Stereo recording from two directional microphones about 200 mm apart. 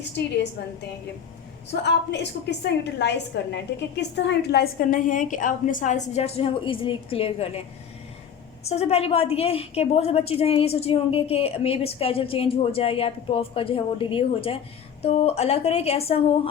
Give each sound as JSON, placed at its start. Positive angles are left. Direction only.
{"t": 1.7, "sound": "a woman's voice", "side_deg": 60}
{"t": 8.6, "sound": "a woman's voice", "side_deg": 30}